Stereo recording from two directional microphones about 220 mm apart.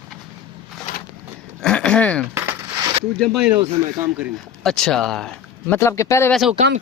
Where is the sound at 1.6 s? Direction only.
5° left (ahead or behind).